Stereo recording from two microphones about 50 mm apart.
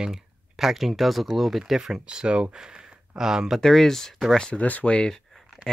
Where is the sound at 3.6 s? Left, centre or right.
Centre.